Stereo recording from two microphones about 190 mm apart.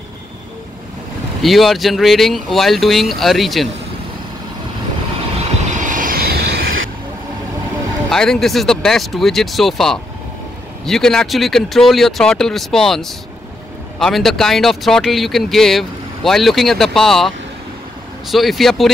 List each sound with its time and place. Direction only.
1.4 s speech: centre (ahead or behind)
5.7 s vehicle: 45° right (ahead or behind)
8.1 s speech: centre (ahead or behind)
18.3 s speech: centre (ahead or behind)